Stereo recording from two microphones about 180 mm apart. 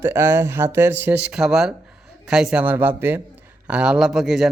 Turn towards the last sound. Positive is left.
turn(degrees=0)  # may be behind; listen again after turning